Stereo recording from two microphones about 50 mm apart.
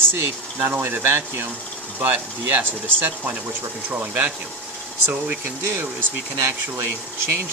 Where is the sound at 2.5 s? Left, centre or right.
Right.